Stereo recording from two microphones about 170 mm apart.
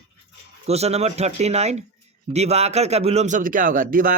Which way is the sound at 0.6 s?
40° right (ahead or behind).